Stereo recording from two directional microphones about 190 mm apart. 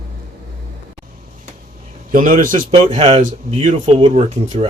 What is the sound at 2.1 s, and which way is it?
Speech, 45° right (ahead or behind).